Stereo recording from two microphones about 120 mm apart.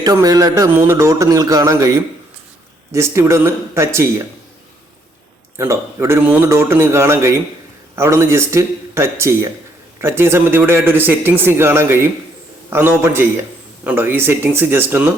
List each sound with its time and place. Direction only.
0.0 s a man's voice: 30° right (ahead or behind)
2.9 s a man's voice: 20° right (ahead or behind)
5.5 s a man's voice: 25° right (ahead or behind)